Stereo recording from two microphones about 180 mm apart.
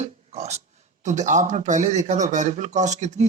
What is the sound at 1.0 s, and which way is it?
Speech, 40° right (ahead or behind).